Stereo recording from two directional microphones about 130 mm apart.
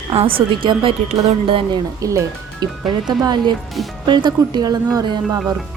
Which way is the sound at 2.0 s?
25° right (ahead or behind).